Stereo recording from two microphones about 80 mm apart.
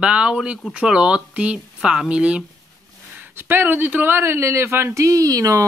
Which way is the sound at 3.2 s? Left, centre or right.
Right.